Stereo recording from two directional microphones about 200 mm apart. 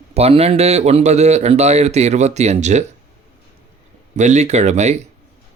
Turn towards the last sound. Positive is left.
turn(degrees=-35)  # may be behind; listen again after turning